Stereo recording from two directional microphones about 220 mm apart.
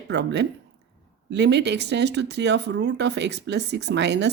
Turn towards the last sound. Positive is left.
turn(degrees=-50)  # may be behind; listen again after turning